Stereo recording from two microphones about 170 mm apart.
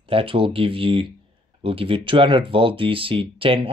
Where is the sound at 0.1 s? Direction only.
30° right (ahead or behind).